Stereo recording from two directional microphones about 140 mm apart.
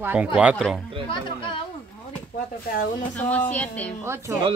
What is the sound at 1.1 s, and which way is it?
Speech, 35° left (ahead or behind).